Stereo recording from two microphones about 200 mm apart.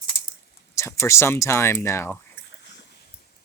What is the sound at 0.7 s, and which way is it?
Speech, 15° left (ahead or behind).